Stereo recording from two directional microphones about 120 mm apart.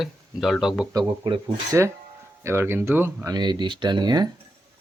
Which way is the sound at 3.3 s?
40° right (ahead or behind).